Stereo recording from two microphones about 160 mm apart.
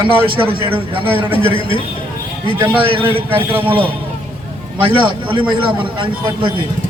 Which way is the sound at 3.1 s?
35° right (ahead or behind).